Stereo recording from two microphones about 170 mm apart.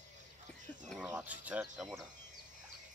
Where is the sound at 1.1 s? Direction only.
10° right (ahead or behind).